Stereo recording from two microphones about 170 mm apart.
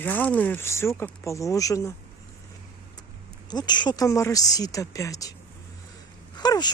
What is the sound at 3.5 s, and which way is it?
Speech, 25° left (ahead or behind).